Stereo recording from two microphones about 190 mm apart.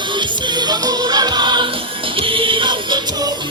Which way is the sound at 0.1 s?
25° right (ahead or behind).